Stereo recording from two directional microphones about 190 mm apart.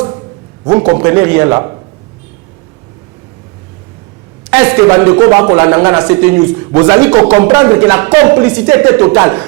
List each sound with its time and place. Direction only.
0.6 s a man's voice: 20° right (ahead or behind)
4.5 s a man's voice: 10° right (ahead or behind)